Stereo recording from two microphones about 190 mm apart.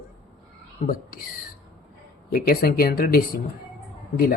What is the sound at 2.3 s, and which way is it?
Speech, 50° left (ahead or behind).